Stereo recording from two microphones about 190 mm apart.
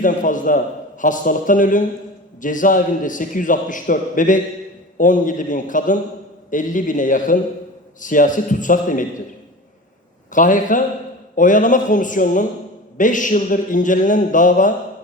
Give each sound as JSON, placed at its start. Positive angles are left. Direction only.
{"t": 0.0, "sound": "a man's voice", "side_deg": 45}
{"t": 10.3, "sound": "a man's voice", "side_deg": 45}